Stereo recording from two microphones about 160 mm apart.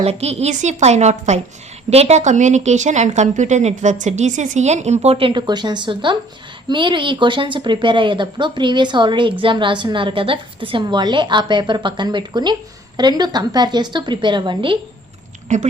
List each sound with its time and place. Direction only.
0.0 s a woman's voice: 40° right (ahead or behind)
15.5 s a woman's voice: 45° right (ahead or behind)